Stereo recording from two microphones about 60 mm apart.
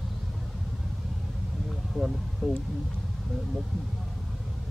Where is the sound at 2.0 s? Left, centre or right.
Centre.